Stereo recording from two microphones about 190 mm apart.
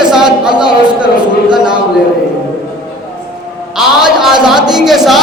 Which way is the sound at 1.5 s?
25° right (ahead or behind).